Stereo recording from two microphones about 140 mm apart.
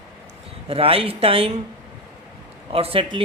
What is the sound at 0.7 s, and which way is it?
Speech, 45° right (ahead or behind).